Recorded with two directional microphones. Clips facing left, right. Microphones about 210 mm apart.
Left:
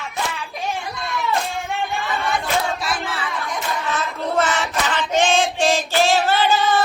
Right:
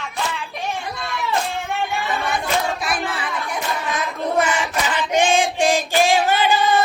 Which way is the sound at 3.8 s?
15° right (ahead or behind).